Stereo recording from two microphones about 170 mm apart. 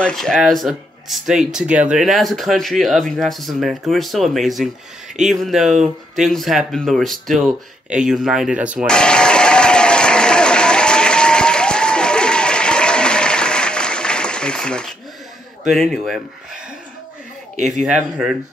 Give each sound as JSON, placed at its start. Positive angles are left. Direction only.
{"t": 0.0, "sound": "speech", "side_deg": 5}
{"t": 8.8, "sound": "applause", "side_deg": 5}
{"t": 15.6, "sound": "speech", "side_deg": 0}
{"t": 17.6, "sound": "a man's voice", "side_deg": -45}